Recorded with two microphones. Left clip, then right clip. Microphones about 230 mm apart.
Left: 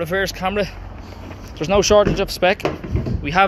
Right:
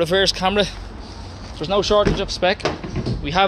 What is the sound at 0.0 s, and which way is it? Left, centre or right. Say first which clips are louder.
Speech: right 3 dB; centre.